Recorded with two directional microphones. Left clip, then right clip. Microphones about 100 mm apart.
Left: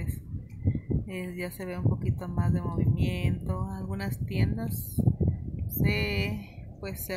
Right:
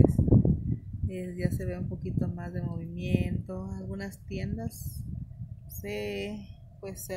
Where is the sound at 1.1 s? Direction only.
15° left (ahead or behind).